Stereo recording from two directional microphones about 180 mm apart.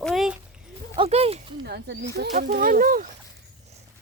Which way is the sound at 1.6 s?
60° right (ahead or behind).